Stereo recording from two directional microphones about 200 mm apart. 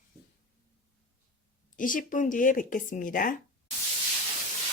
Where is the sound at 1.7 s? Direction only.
40° left (ahead or behind).